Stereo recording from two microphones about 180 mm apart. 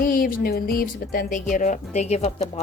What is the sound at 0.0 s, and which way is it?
Speech, 50° left (ahead or behind).